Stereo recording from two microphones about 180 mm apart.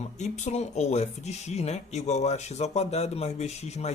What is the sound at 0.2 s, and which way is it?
Speech, 40° left (ahead or behind).